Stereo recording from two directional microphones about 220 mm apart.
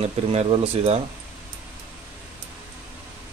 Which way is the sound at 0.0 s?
30° right (ahead or behind).